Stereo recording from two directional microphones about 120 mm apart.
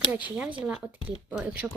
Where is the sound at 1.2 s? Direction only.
10° right (ahead or behind).